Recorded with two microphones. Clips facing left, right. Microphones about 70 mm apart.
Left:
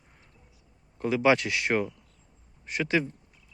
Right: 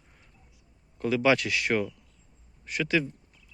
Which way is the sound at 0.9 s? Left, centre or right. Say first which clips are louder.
Left 1 dB; left.